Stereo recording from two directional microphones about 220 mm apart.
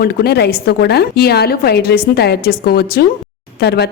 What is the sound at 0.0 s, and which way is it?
A woman's voice, 45° left (ahead or behind).